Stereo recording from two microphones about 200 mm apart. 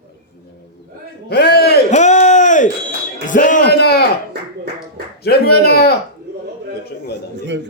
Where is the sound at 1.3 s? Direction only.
50° left (ahead or behind).